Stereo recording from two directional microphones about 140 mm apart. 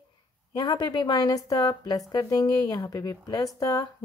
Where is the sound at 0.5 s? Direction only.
30° left (ahead or behind).